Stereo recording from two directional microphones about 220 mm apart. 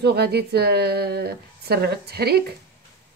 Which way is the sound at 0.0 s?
45° right (ahead or behind).